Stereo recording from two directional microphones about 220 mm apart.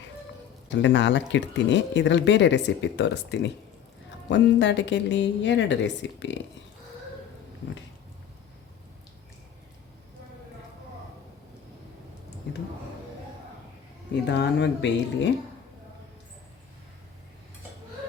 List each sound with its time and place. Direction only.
0.7 s a woman's voice: 55° left (ahead or behind)
14.3 s speech: 50° left (ahead or behind)